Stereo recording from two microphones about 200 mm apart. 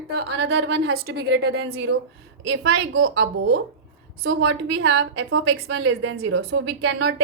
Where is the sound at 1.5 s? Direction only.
90° right; by 3.6 s 75° right (ahead or behind).